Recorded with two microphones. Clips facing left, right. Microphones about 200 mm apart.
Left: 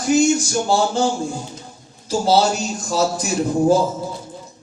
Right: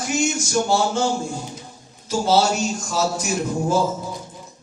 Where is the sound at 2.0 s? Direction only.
35° left (ahead or behind).